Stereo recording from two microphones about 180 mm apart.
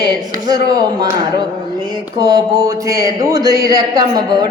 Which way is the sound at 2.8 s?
20° right (ahead or behind).